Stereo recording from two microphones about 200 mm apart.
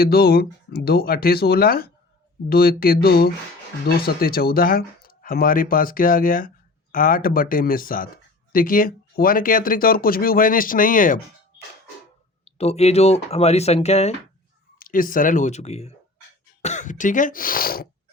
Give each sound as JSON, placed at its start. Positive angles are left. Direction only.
{"t": 0.0, "sound": "speech", "side_deg": 50}
{"t": 12.5, "sound": "speech", "side_deg": 30}
{"t": 14.8, "sound": "speech", "side_deg": 45}